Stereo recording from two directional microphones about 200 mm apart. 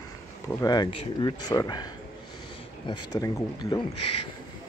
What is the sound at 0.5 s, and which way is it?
Speech, 20° left (ahead or behind).